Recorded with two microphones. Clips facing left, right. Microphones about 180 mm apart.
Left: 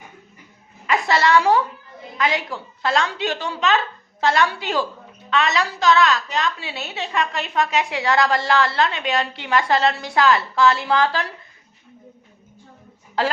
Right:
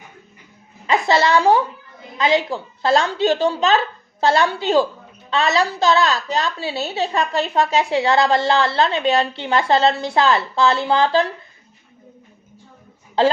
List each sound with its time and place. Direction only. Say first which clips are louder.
0.9 s a woman's voice: right 2 dB; 25° right (ahead or behind)
13.2 s a woman's voice: right 6 dB; 25° right (ahead or behind)